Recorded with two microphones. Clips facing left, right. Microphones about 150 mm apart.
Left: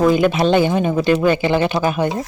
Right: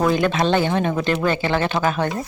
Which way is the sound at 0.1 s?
10° left (ahead or behind).